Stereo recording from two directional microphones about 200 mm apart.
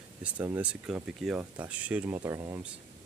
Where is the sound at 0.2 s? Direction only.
10° right (ahead or behind).